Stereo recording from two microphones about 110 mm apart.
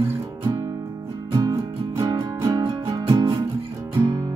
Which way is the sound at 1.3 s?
35° right (ahead or behind).